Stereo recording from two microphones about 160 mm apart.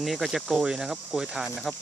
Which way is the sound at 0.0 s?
Centre (ahead or behind).